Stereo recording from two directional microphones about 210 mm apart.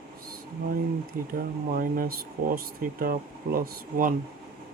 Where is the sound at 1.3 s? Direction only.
40° right (ahead or behind).